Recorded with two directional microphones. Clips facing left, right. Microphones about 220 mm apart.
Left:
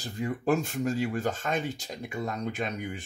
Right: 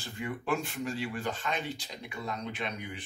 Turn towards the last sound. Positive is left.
turn(degrees=45)  # may be behind; listen again after turning